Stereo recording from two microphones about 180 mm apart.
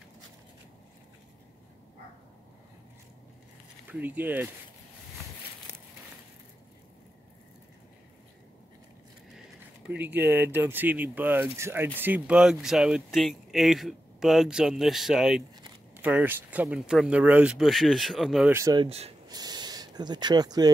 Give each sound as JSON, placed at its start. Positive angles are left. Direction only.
{"t": 3.8, "sound": "speech", "side_deg": -10}
{"t": 9.8, "sound": "speech", "side_deg": -10}
{"t": 18.5, "sound": "speech", "side_deg": -20}
{"t": 18.9, "sound": "speech", "side_deg": -35}
{"t": 19.2, "sound": "speech", "side_deg": -20}